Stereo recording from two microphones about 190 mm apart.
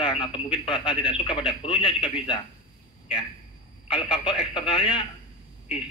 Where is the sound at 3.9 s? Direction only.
25° left (ahead or behind).